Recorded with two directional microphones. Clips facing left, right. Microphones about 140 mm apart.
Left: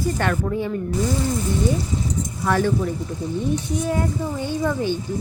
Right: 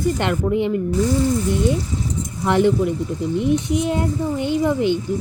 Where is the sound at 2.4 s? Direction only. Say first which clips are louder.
Right 4 dB; 20° right (ahead or behind).